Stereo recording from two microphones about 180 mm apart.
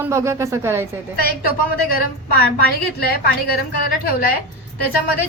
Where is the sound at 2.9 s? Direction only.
60° left (ahead or behind).